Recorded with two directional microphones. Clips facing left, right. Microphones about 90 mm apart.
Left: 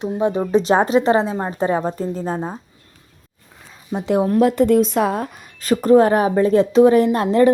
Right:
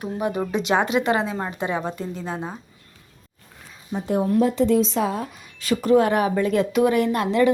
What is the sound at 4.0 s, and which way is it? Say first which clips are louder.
Speech: left 5 dB; 80° left.